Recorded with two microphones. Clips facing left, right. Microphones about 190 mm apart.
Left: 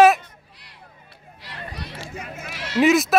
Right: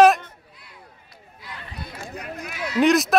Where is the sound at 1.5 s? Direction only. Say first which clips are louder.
Left 2 dB; 75° left (ahead or behind).